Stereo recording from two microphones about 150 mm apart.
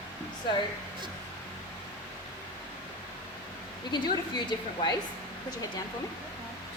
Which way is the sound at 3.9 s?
30° left (ahead or behind).